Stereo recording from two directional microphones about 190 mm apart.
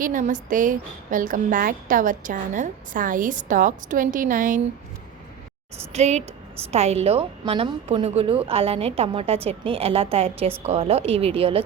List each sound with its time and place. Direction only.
0.0 s a woman's voice: 45° right (ahead or behind)
5.9 s a woman's voice: 35° right (ahead or behind)